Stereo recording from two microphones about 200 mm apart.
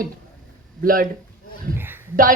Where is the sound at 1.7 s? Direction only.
10° right (ahead or behind).